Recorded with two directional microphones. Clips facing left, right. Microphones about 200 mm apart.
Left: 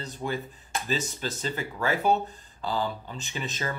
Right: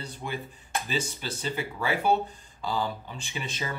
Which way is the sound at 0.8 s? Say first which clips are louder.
Left 3 dB; 40° left (ahead or behind).